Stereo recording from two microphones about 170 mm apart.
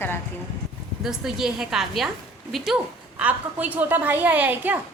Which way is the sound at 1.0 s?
Centre (ahead or behind).